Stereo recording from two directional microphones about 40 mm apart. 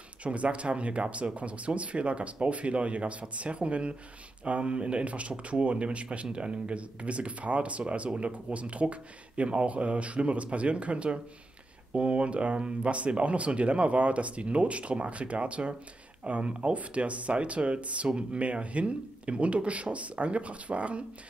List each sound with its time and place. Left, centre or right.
0.2 s speech: right